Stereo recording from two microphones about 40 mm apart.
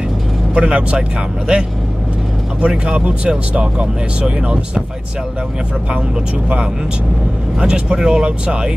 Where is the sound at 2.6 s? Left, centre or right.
Right.